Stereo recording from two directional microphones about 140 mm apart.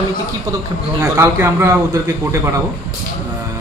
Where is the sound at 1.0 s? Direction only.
20° right (ahead or behind).